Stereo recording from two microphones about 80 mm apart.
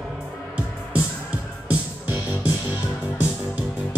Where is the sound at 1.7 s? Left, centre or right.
Centre.